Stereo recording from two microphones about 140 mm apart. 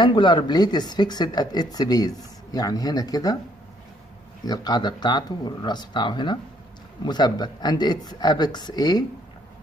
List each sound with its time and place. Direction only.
0.0 s speech: 35° left (ahead or behind)
4.5 s speech: 30° left (ahead or behind)